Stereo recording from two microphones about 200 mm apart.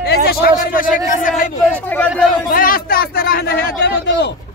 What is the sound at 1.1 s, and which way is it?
Speech, 40° left (ahead or behind).